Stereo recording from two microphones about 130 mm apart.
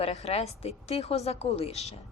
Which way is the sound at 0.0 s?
55° left (ahead or behind).